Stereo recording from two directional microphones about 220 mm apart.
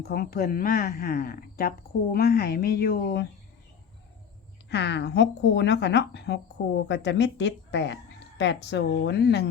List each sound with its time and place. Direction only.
0.0 s a woman's voice: 45° left (ahead or behind)
4.7 s a woman's voice: 50° left (ahead or behind)